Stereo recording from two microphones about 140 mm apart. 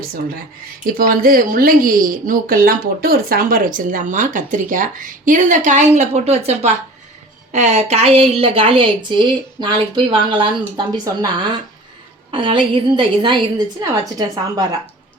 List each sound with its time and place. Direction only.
0.9 s a woman's voice: 90° right; by 13.5 s 35° right (ahead or behind)